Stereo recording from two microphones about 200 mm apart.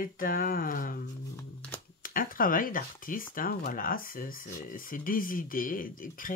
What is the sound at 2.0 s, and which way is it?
Speech, 45° left (ahead or behind).